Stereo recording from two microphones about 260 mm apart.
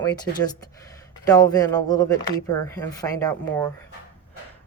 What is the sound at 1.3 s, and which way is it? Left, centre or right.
Speech, centre.